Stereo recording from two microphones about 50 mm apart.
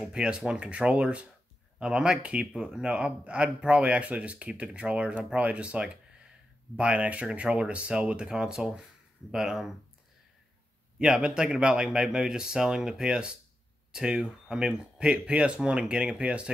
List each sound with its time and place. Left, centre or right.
0.1 s speech: centre
11.0 s speech: centre